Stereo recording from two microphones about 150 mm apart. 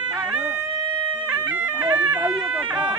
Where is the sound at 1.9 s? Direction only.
10° right (ahead or behind).